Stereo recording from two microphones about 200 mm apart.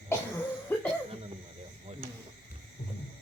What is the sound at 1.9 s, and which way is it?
Cricket, 35° right (ahead or behind).